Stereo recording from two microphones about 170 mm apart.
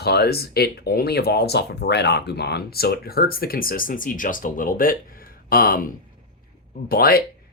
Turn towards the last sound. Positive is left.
turn(degrees=60)  # may be behind; listen again after turning